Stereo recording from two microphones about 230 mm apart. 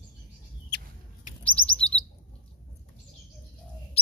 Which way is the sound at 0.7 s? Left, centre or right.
Left.